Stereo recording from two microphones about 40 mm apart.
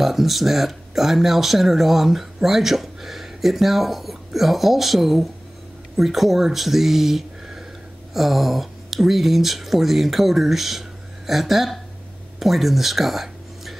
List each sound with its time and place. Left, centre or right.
0.0 s speech: centre